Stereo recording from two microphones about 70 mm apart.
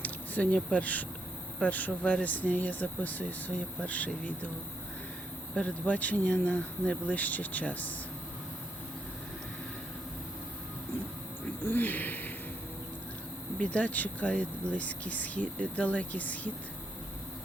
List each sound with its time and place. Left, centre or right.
0.0 s speech: left
5.5 s speech: centre
11.6 s speech: left
13.7 s speech: centre